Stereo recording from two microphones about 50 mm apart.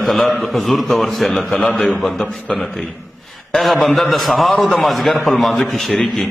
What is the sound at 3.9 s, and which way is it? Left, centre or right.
A man's voice, centre.